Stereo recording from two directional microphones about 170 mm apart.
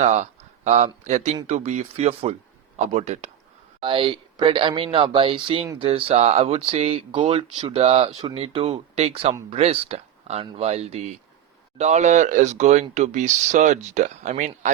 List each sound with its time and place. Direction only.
0.0 s speech: 40° right (ahead or behind)
3.8 s speech: 30° right (ahead or behind); by 14.7 s 45° right (ahead or behind)